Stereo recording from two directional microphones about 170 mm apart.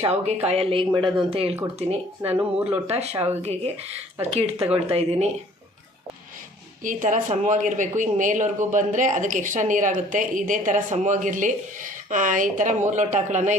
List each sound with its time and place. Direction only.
0.1 s a woman's voice: 40° right (ahead or behind)
2.2 s speech: 10° right (ahead or behind)
3.4 s a woman's voice: 40° right (ahead or behind)
6.8 s speech: 50° right (ahead or behind)